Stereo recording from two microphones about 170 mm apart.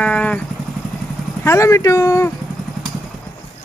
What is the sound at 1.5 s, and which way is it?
Speech, 15° left (ahead or behind).